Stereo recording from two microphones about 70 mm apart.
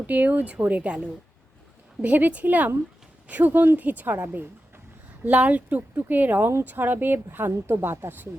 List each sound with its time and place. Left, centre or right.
0.1 s a woman's voice: right